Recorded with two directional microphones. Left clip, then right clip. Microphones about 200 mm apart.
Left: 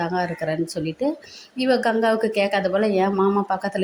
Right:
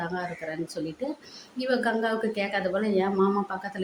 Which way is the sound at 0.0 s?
25° left (ahead or behind).